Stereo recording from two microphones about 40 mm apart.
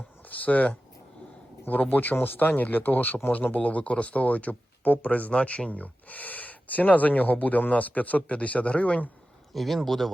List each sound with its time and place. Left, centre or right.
0.3 s speech: left
9.5 s speech: centre